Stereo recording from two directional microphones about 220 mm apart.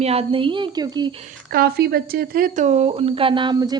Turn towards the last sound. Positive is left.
turn(degrees=-20)  # may be behind; listen again after turning